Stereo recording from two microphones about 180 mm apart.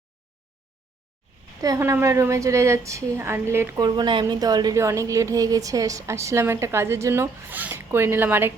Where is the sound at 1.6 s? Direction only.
15° right (ahead or behind).